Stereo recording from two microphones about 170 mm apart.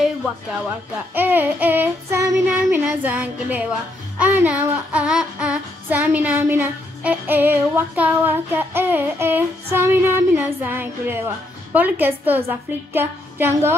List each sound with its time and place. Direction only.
1.1 s child singing: 10° right (ahead or behind)